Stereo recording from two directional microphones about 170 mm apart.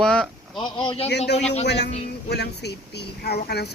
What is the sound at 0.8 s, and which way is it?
Speech, 35° left (ahead or behind).